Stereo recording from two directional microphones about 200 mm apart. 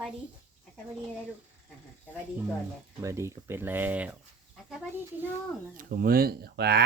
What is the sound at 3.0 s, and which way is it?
Speech, 15° right (ahead or behind).